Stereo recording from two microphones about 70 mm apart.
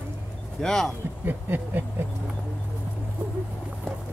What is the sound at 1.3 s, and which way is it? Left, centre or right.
Speech, right.